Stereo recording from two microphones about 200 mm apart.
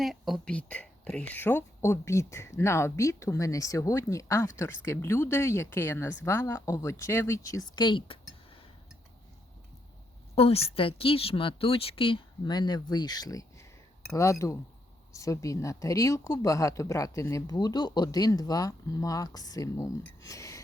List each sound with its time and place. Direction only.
0.0 s speech: centre (ahead or behind); by 8.6 s 25° left (ahead or behind)
10.3 s a woman's voice: 30° left (ahead or behind)